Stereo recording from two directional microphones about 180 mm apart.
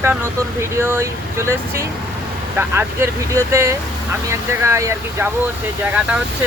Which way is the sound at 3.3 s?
15° right (ahead or behind).